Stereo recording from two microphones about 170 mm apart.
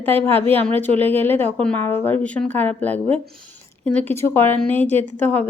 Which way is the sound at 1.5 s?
10° left (ahead or behind).